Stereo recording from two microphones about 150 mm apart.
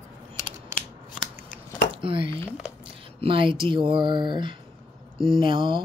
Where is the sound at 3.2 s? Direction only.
35° right (ahead or behind).